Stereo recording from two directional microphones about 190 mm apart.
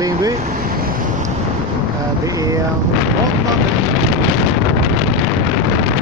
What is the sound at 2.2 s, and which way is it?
Speech, 15° right (ahead or behind).